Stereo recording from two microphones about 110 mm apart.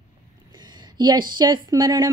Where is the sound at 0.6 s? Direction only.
40° right (ahead or behind).